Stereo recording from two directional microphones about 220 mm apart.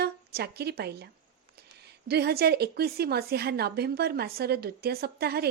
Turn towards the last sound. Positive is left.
turn(degrees=-45)  # may be behind; listen again after turning